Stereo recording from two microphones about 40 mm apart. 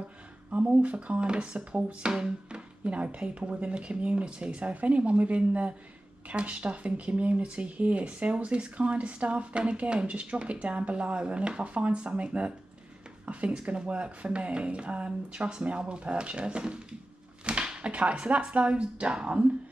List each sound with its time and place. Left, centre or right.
0.8 s speech: right
2.1 s music: centre
2.8 s speech: right
17.5 s a sound: right
18.5 s speech: right